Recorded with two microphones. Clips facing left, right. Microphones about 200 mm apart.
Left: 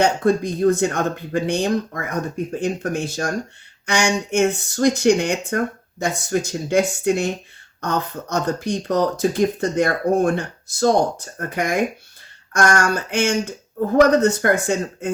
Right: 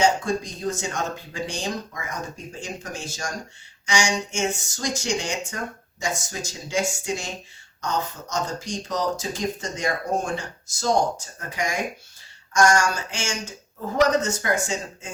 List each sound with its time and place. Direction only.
0.0 s speech: 60° left (ahead or behind)